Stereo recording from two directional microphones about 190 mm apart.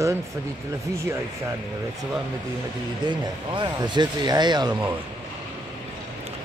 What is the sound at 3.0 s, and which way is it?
A man's voice, 25° right (ahead or behind).